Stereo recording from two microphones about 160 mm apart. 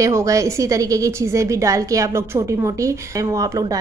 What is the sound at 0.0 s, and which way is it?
A woman's voice, 20° right (ahead or behind).